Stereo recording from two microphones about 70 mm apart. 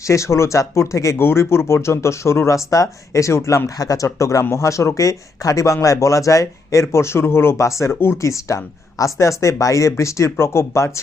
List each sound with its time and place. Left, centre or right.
0.1 s speech: left
1.2 s speech: left
3.8 s speech: left